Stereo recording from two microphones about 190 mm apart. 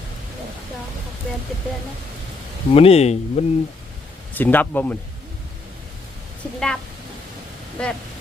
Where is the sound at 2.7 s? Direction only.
30° left (ahead or behind).